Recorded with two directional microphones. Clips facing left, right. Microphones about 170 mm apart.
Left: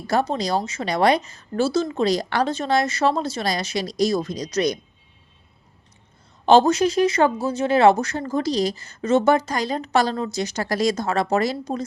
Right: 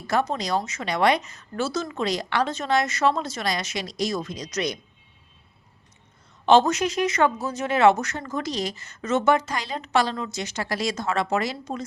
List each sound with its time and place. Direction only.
0.1 s speech: 35° left (ahead or behind)
6.4 s speech: 35° left (ahead or behind)